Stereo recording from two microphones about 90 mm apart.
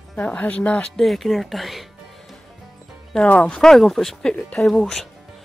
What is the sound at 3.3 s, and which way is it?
Speech, 15° left (ahead or behind).